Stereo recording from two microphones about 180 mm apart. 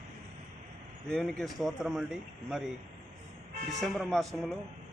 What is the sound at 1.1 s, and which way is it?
Speech, centre (ahead or behind).